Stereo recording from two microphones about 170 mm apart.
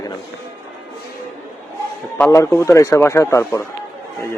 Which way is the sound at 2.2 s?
15° left (ahead or behind).